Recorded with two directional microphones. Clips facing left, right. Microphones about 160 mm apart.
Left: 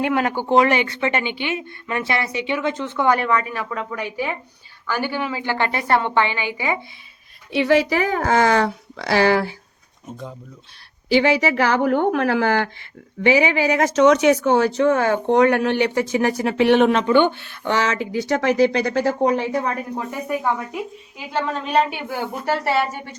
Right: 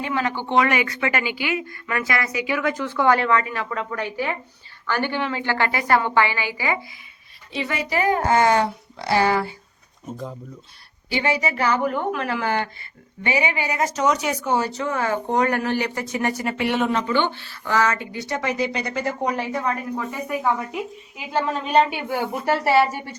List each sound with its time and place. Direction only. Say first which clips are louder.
0.0 s a woman's voice: left 4 dB; 55° left (ahead or behind); by 6.7 s 20° left (ahead or behind)
7.5 s a woman's voice: left 8 dB; 80° left
10.1 s a woman's voice: right 2 dB; centre (ahead or behind)
11.1 s a woman's voice: left 6 dB; 90° left
20.2 s a woman's voice: left 1 dB; 5° left (ahead or behind)